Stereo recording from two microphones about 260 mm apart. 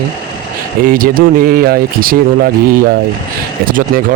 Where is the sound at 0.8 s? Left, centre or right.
Right.